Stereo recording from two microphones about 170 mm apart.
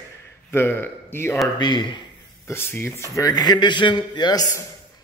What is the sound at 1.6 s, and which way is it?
Speech, 25° left (ahead or behind).